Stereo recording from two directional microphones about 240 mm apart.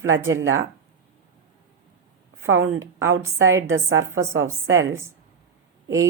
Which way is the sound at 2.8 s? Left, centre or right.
Centre.